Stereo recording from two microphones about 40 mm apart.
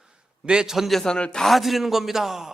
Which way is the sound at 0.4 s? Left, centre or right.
Centre.